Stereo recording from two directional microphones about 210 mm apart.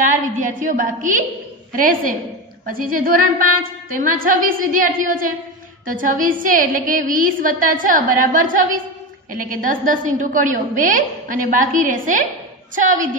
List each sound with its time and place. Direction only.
0.0 s a woman's voice: 35° right (ahead or behind)